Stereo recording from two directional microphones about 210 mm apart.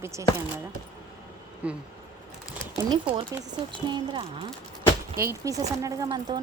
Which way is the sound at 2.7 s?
20° right (ahead or behind).